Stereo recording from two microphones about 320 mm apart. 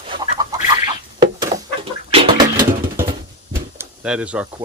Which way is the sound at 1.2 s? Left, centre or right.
Centre.